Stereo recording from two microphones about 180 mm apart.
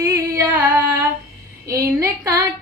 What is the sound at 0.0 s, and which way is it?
Music, 20° right (ahead or behind).